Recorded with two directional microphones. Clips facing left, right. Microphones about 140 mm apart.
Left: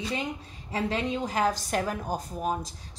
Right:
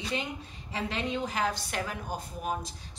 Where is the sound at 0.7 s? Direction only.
40° left (ahead or behind).